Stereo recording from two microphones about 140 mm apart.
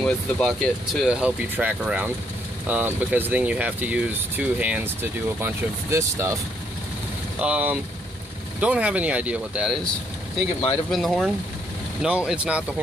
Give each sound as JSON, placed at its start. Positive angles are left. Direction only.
{"t": 0.0, "sound": "speech", "side_deg": 5}
{"t": 7.3, "sound": "speech", "side_deg": -10}
{"t": 10.9, "sound": "speech", "side_deg": 0}